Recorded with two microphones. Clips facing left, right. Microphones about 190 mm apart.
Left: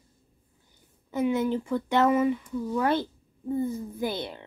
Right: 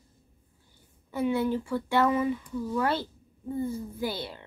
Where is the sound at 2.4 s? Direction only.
10° left (ahead or behind).